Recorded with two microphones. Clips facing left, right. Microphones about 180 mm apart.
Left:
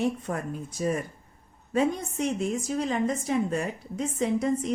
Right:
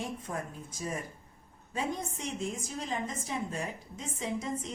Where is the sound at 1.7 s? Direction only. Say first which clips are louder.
Left 9 dB; 70° left (ahead or behind).